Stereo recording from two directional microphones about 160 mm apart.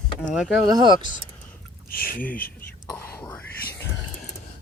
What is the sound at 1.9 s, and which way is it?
Speech, 65° left (ahead or behind).